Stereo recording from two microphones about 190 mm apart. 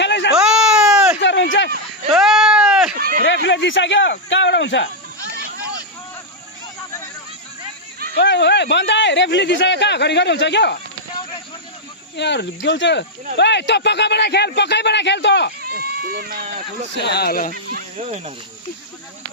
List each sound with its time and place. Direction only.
0.0 s baby cry: 65° left (ahead or behind)
0.3 s baby cry: 5° right (ahead or behind)
1.2 s a sound: 70° left (ahead or behind)
2.0 s sheep: centre (ahead or behind)
3.2 s speech: 65° left (ahead or behind)
8.1 s speech: 65° left (ahead or behind)
12.1 s speech: 65° left (ahead or behind)
15.7 s speech: 50° right (ahead or behind)
16.9 s speech: 60° left (ahead or behind)